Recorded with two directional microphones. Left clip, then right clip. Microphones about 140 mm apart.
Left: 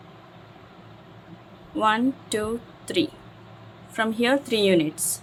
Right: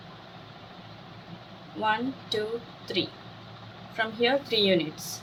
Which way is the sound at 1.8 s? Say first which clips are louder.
Left 6 dB; 70° left (ahead or behind).